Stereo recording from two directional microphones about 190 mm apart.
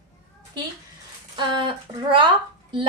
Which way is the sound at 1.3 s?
25° right (ahead or behind).